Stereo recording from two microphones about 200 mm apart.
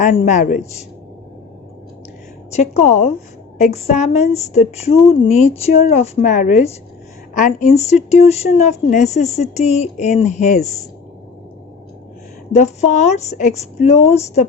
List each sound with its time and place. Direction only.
0.0 s speech: 35° left (ahead or behind)
2.5 s speech: 35° left (ahead or behind)
12.5 s speech: 35° left (ahead or behind)